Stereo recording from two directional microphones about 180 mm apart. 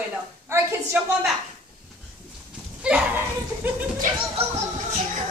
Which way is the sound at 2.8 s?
10° right (ahead or behind).